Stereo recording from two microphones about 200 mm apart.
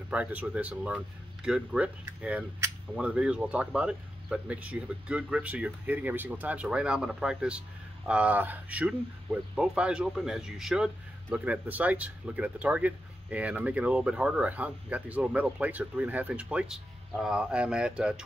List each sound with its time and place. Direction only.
0.1 s speech: 5° right (ahead or behind)